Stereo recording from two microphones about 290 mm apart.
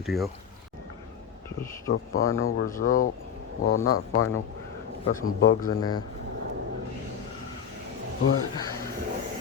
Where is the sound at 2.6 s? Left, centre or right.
Left.